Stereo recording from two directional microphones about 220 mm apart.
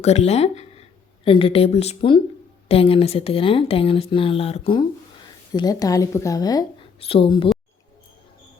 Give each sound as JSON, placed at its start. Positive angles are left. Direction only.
{"t": 0.0, "sound": "speech", "side_deg": 30}